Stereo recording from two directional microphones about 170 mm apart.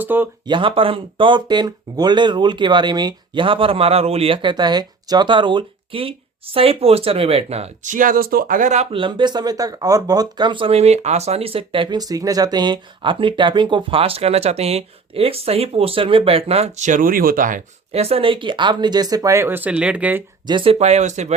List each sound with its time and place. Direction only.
0.0 s speech: 10° right (ahead or behind)
0.4 s speech: 30° right (ahead or behind); by 17.6 s 55° right (ahead or behind)
17.9 s speech: 35° right (ahead or behind); by 20.2 s 10° right (ahead or behind)
20.5 s speech: 30° right (ahead or behind)